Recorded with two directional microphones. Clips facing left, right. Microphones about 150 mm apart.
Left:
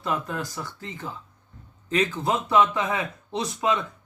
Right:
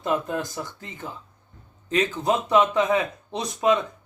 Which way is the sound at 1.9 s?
20° right (ahead or behind).